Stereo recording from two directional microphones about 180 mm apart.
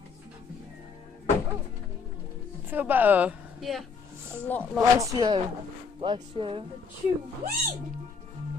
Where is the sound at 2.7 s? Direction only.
10° right (ahead or behind).